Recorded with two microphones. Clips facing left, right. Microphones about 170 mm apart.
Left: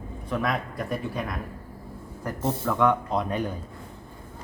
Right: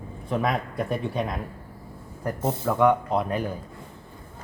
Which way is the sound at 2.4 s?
15° right (ahead or behind).